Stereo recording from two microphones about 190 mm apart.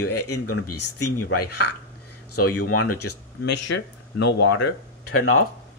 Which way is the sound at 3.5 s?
70° left (ahead or behind).